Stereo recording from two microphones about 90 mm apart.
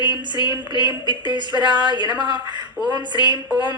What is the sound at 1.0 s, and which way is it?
A woman's voice, 55° right (ahead or behind).